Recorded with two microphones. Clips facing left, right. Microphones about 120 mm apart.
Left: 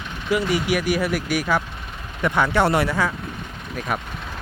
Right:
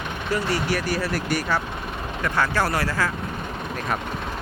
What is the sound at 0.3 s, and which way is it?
Speech, 15° left (ahead or behind).